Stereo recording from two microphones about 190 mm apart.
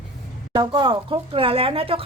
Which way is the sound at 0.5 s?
20° right (ahead or behind).